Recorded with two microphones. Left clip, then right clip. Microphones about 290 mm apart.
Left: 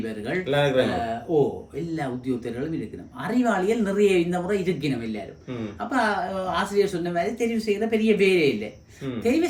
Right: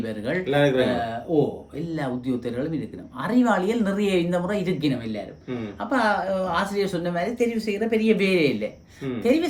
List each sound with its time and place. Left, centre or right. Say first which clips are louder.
0.4 s a man's voice: right 1 dB; centre
2.0 s speech: right 2 dB; centre
5.9 s speech: right 2 dB; centre